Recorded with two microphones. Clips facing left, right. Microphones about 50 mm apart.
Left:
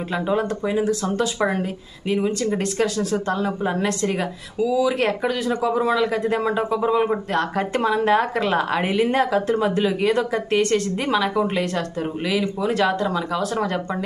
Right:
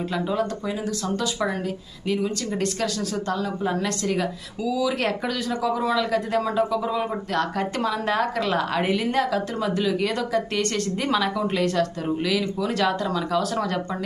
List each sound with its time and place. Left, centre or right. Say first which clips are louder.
0.1 s speech: left 5 dB; left